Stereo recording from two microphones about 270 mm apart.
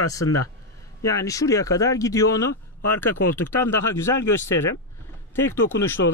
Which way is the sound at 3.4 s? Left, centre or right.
Left.